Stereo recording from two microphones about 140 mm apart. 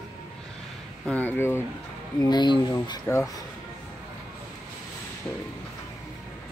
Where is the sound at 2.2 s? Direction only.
30° left (ahead or behind).